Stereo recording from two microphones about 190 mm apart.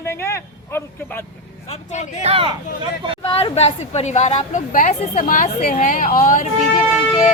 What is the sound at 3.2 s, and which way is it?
A woman's voice, 30° left (ahead or behind).